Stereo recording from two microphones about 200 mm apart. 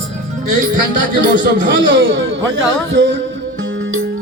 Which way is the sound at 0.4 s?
40° right (ahead or behind).